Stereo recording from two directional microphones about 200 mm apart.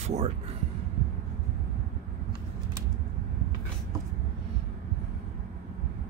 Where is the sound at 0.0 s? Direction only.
35° right (ahead or behind).